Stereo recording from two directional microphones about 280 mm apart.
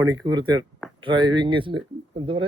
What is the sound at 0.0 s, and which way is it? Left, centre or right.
A man's voice, centre.